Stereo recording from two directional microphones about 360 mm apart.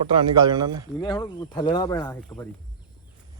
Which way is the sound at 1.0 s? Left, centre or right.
Centre.